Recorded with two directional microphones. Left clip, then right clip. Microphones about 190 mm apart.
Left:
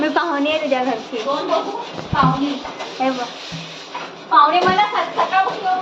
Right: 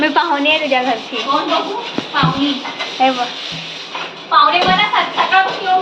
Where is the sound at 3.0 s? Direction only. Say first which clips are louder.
Right 7 dB; 5° right (ahead or behind).